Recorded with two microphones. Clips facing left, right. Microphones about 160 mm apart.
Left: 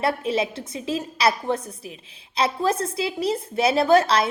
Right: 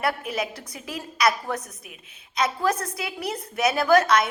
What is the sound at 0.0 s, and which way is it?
A woman's voice, 25° left (ahead or behind).